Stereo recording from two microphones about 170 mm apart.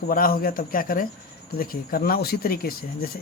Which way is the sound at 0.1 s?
60° left (ahead or behind).